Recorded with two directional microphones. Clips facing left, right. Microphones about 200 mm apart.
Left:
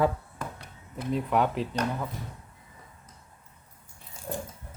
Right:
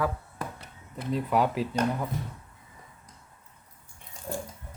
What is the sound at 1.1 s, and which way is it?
Speech, centre (ahead or behind).